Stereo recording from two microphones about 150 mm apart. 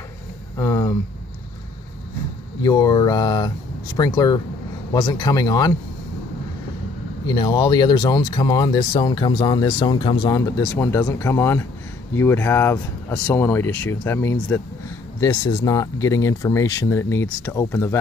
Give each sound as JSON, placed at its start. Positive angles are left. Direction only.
{"t": 0.6, "sound": "speech", "side_deg": 20}
{"t": 2.6, "sound": "speech", "side_deg": 25}
{"t": 7.2, "sound": "speech", "side_deg": 30}